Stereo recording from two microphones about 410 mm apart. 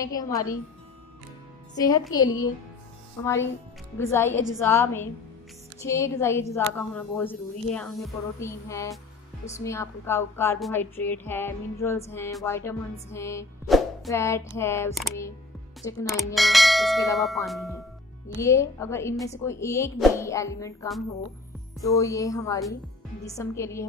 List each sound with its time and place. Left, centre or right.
0.0 s a woman's voice: centre
1.8 s a woman's voice: centre
4.0 s bell: centre
5.8 s a woman's voice: centre
15.8 s bell: centre
18.4 s a woman's voice: centre